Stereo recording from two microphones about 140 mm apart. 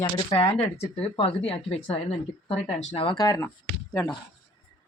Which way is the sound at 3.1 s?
25° left (ahead or behind).